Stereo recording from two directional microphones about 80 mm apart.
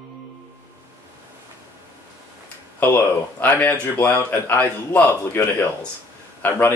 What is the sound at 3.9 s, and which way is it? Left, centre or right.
Speech, centre.